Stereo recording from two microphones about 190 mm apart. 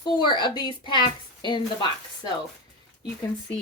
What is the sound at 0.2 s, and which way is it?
Speech, 25° left (ahead or behind).